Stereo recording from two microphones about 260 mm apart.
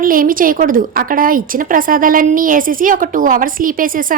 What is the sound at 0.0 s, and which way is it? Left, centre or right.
A woman's voice, right.